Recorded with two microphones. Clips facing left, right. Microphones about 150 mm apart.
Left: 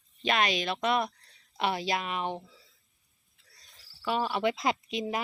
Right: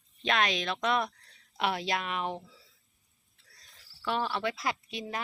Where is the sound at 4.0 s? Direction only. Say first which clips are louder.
Left 2 dB; 5° left (ahead or behind).